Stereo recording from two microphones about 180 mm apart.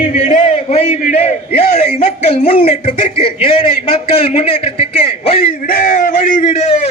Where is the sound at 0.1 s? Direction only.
45° left (ahead or behind).